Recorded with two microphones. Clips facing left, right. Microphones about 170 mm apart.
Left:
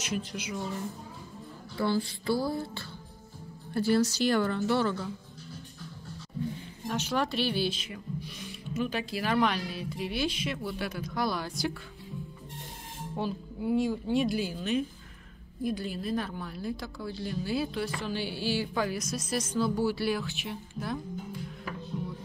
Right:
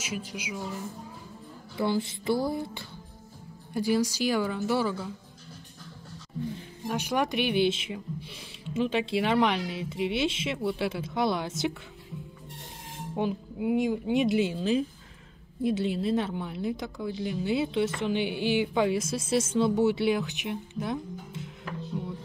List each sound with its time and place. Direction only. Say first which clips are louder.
0.0 s speech: left 1 dB; 10° right (ahead or behind)
1.8 s a woman's voice: right 1 dB; 20° right (ahead or behind)
6.9 s a woman's voice: right 2 dB; 10° right (ahead or behind)
13.1 s a woman's voice: right 4 dB; 15° right (ahead or behind)